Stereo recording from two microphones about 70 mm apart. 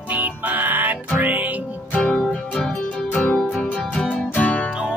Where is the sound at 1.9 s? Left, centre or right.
Centre.